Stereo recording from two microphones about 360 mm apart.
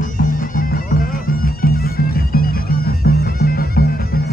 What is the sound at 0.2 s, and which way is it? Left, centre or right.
Bagpipes, left.